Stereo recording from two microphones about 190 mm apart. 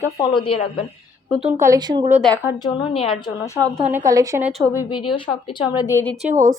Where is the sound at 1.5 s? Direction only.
15° right (ahead or behind).